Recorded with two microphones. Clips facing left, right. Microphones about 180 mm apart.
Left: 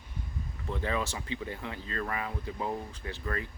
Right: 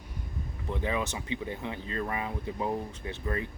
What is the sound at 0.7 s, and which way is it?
Speech, 15° right (ahead or behind).